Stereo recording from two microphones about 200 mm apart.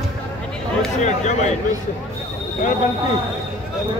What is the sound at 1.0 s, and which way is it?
Speech, 35° left (ahead or behind).